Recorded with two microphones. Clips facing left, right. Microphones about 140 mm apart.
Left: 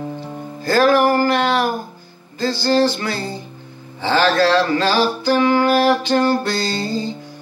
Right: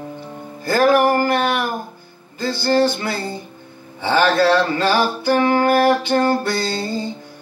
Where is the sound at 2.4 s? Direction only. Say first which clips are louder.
Left 1 dB; 55° right (ahead or behind).